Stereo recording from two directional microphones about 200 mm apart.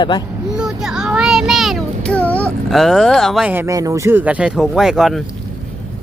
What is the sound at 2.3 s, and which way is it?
Speech, 5° left (ahead or behind).